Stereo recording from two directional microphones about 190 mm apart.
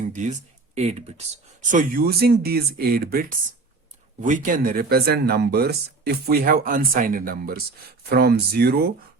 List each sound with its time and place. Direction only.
0.0 s speech: 40° right (ahead or behind)
1.7 s speech: 50° right (ahead or behind)